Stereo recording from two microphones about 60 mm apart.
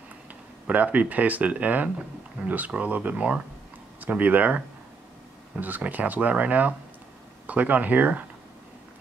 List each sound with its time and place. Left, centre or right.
0.7 s speech: right